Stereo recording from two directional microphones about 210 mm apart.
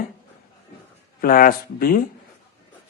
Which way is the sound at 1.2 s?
45° left (ahead or behind).